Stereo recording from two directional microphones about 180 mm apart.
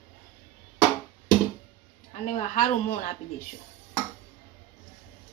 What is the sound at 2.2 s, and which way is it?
Speech, 45° left (ahead or behind).